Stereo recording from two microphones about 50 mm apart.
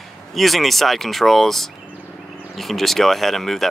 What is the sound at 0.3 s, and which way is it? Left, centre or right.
Speech, centre.